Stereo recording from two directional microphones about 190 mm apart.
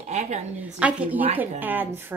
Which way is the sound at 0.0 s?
35° right (ahead or behind).